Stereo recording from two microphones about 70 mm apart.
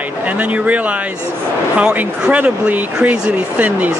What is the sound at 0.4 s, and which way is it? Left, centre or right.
Speech, centre.